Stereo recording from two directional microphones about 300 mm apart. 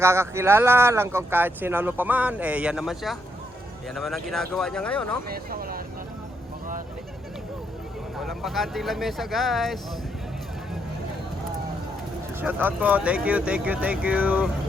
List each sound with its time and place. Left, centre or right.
0.0 s speech: centre
5.3 s speech: right
8.2 s speech: centre
12.4 s speech: centre